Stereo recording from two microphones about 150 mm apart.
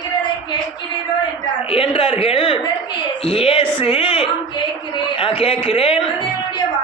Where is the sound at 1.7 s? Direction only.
40° left (ahead or behind).